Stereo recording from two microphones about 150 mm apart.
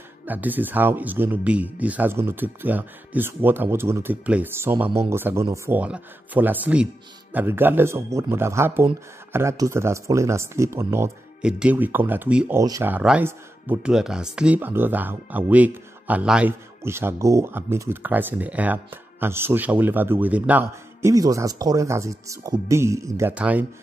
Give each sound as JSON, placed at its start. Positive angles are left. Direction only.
{"t": 0.2, "sound": "speech", "side_deg": -10}
{"t": 12.5, "sound": "speech", "side_deg": -20}
{"t": 12.9, "sound": "speech", "side_deg": -10}
{"t": 21.1, "sound": "speech", "side_deg": -20}